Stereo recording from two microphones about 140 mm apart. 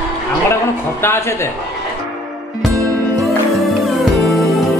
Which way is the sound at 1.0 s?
20° left (ahead or behind).